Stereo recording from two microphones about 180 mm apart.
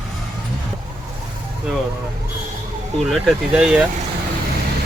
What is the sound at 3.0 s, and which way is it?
Speech, centre (ahead or behind).